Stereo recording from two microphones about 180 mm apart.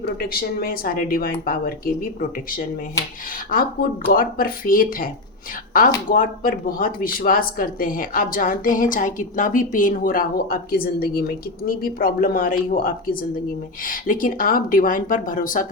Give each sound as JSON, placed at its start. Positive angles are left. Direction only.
{"t": 0.0, "sound": "speech", "side_deg": 55}
{"t": 3.5, "sound": "speech", "side_deg": 55}
{"t": 6.1, "sound": "speech", "side_deg": 50}